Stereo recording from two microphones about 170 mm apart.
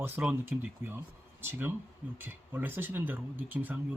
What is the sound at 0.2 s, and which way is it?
Speech, 5° right (ahead or behind).